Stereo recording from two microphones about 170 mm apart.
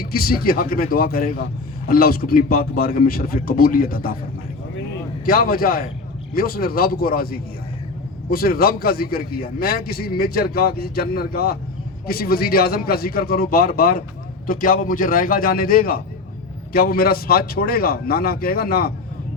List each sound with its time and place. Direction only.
0.0 s a man's voice: 60° left (ahead or behind)
5.2 s a man's voice: 60° left (ahead or behind)